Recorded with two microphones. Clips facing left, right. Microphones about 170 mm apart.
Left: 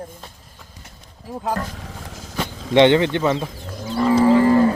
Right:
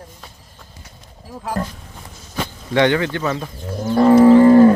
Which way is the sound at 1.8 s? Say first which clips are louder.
Left 4 dB; 90° left.